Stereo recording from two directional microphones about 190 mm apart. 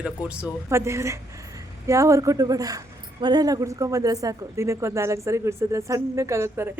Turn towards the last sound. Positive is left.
turn(degrees=-15)  # may be behind; listen again after turning